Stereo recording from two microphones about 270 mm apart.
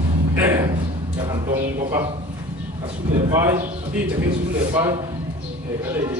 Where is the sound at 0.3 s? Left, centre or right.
Centre.